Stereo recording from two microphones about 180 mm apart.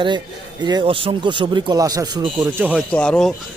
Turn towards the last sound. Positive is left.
turn(degrees=5)  # may be behind; listen again after turning